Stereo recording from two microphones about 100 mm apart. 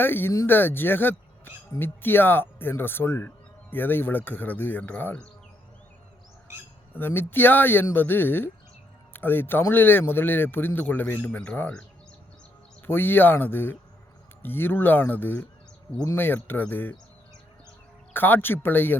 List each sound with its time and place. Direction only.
0.0 s speech: 20° left (ahead or behind)
6.9 s speech: 20° left (ahead or behind)
12.8 s speech: 20° left (ahead or behind)
18.1 s speech: 20° left (ahead or behind)